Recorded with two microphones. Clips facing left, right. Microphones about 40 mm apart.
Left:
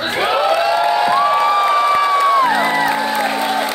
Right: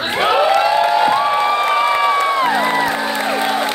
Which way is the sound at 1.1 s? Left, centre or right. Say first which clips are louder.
Left 1 dB; centre.